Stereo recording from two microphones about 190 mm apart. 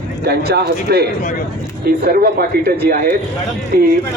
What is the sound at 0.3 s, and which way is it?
A man's voice, 60° right (ahead or behind).